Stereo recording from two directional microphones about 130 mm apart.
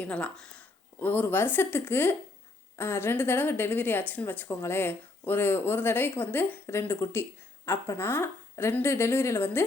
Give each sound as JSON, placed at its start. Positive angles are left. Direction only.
{"t": 0.0, "sound": "speech", "side_deg": 10}